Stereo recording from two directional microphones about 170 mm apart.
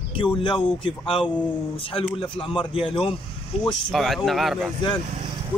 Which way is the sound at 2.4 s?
30° left (ahead or behind).